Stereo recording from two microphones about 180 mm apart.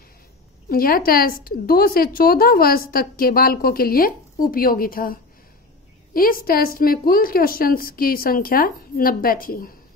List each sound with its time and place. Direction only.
0.7 s a woman's voice: 55° left (ahead or behind)